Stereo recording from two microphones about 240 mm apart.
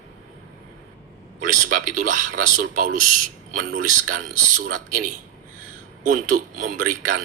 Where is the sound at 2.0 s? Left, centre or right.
Right.